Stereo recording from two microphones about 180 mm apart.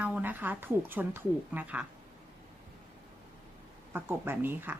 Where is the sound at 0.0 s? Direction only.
10° right (ahead or behind).